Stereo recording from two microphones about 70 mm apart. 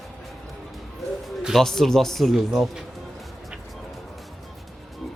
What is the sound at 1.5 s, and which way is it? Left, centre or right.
Speech, centre.